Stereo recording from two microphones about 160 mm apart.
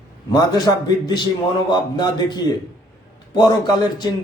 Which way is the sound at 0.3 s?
25° left (ahead or behind).